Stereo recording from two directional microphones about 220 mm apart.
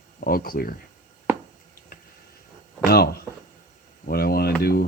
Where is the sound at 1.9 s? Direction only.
45° left (ahead or behind).